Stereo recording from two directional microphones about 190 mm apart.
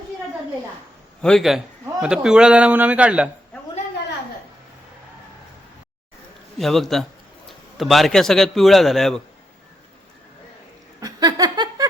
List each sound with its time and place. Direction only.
1.2 s a man's voice: centre (ahead or behind)
6.6 s a man's voice: centre (ahead or behind)
11.0 s a sound: 20° right (ahead or behind)